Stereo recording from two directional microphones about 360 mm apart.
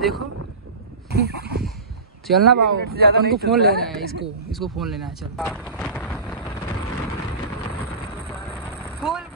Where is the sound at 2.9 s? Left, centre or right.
Right.